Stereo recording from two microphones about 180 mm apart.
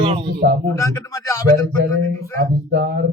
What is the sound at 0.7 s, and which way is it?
Speech, 15° left (ahead or behind).